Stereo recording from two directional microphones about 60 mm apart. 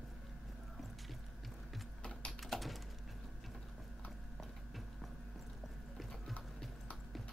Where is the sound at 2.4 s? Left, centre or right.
Centre.